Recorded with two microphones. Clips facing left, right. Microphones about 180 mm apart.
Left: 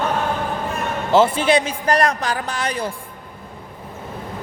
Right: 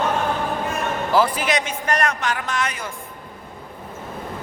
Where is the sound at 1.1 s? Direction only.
25° left (ahead or behind).